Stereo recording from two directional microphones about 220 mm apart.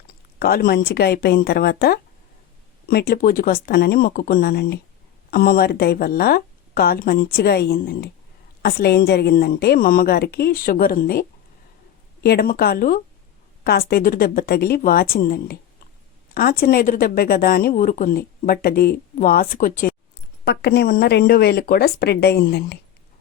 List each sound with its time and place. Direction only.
0.3 s a woman's voice: 45° left (ahead or behind)
20.4 s a woman's voice: 50° left (ahead or behind)